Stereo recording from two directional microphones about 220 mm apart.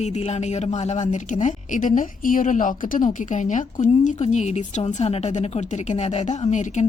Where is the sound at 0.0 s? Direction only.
30° left (ahead or behind).